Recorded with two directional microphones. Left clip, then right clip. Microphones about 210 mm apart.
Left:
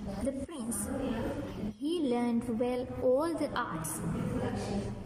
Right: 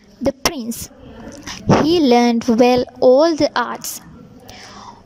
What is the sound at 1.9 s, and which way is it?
A woman's voice, 50° right (ahead or behind).